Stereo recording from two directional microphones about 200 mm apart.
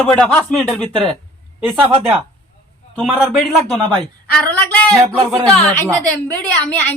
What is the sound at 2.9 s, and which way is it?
A woman's voice, centre (ahead or behind).